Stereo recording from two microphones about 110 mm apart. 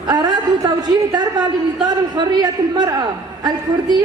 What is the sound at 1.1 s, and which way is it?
A woman's voice, 40° right (ahead or behind).